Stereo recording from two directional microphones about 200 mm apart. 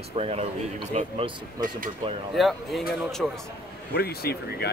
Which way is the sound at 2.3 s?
Centre (ahead or behind).